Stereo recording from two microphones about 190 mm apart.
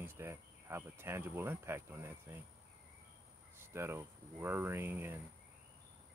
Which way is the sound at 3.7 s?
15° right (ahead or behind).